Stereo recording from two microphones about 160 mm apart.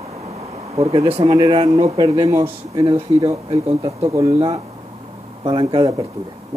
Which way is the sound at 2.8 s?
35° right (ahead or behind).